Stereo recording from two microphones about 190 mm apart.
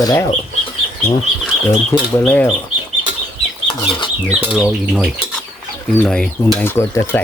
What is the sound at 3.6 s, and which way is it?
Chicken, 25° left (ahead or behind).